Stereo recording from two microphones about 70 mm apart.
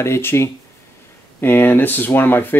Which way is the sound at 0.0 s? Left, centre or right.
Left.